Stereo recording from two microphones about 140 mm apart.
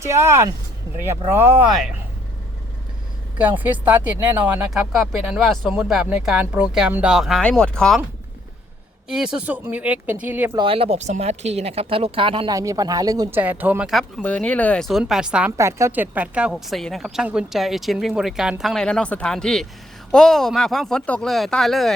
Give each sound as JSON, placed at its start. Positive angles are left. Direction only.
{"t": 0.0, "sound": "speech", "side_deg": -20}
{"t": 3.3, "sound": "speech", "side_deg": -10}
{"t": 9.0, "sound": "speech", "side_deg": -5}
{"t": 10.6, "sound": "speech", "side_deg": -40}
{"t": 12.5, "sound": "speech", "side_deg": -25}
{"t": 13.3, "sound": "speech", "side_deg": -15}
{"t": 14.2, "sound": "speech", "side_deg": 10}
{"t": 15.5, "sound": "speech", "side_deg": -20}